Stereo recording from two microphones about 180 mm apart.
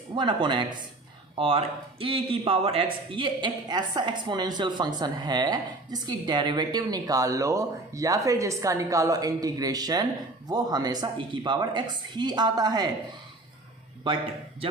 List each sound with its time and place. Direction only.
0.1 s a man's voice: 25° right (ahead or behind)